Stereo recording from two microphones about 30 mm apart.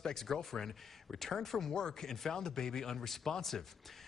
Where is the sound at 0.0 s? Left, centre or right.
Centre.